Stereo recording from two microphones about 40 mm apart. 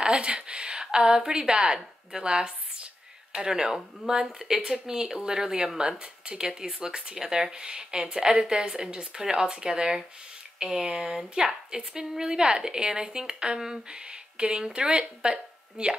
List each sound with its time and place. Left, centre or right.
0.0 s speech: right